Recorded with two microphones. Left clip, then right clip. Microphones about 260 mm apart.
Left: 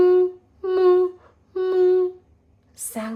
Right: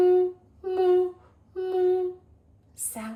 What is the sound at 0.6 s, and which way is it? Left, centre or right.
Speech, left.